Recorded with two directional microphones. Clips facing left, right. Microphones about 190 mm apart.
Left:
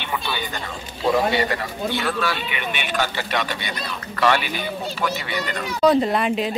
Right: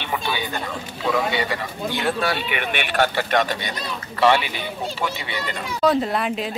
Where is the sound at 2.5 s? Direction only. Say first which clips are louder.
Right 2 dB; 60° right (ahead or behind).